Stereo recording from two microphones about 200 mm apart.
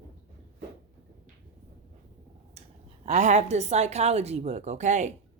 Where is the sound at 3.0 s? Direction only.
35° right (ahead or behind).